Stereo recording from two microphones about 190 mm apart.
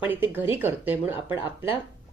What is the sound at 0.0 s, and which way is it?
A woman's voice, 10° right (ahead or behind).